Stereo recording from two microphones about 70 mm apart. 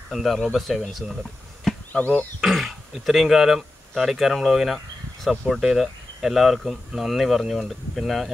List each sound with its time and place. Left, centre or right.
0.1 s speech: centre
1.9 s speech: left
2.4 s speech: centre